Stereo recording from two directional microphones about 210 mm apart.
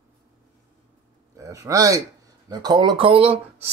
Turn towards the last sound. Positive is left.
turn(degrees=-25)  # may be behind; listen again after turning